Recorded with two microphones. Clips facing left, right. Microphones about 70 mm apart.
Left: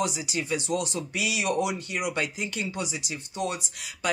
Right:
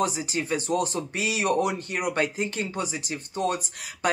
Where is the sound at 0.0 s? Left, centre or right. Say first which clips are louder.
Right 3 dB; right.